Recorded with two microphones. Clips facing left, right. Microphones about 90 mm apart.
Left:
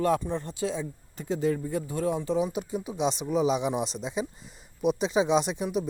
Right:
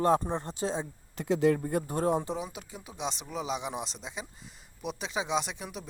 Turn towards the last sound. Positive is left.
turn(degrees=15)  # may be behind; listen again after turning